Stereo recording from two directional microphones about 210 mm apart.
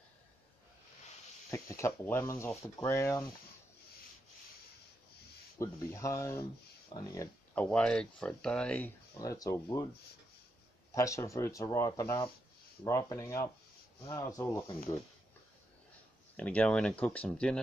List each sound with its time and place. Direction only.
1.5 s speech: 15° left (ahead or behind)
5.6 s speech: 15° left (ahead or behind)
7.5 s speech: 5° left (ahead or behind)
11.0 s speech: 15° left (ahead or behind)
16.3 s speech: 5° left (ahead or behind)